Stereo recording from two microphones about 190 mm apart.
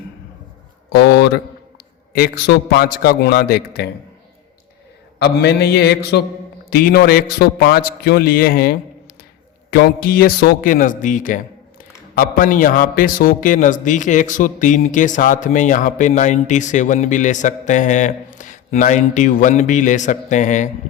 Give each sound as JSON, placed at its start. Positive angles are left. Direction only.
{"t": 0.9, "sound": "a man's voice", "side_deg": 60}
{"t": 5.2, "sound": "a man's voice", "side_deg": 60}